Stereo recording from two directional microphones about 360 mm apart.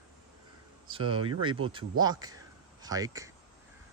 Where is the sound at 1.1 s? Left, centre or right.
Centre.